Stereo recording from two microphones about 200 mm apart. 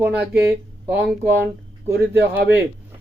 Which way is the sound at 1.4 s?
10° right (ahead or behind).